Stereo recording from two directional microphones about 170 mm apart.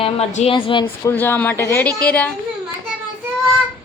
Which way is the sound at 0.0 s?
35° left (ahead or behind).